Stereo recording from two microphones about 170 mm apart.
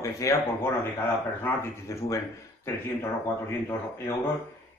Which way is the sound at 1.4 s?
15° left (ahead or behind).